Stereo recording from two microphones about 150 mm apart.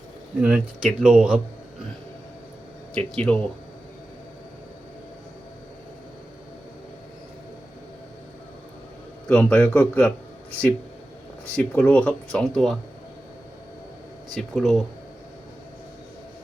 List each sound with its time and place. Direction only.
0.3 s speech: 5° right (ahead or behind)
2.9 s speech: 10° left (ahead or behind)
9.3 s speech: 10° left (ahead or behind)
11.5 s speech: 10° left (ahead or behind)
14.5 s speech: centre (ahead or behind)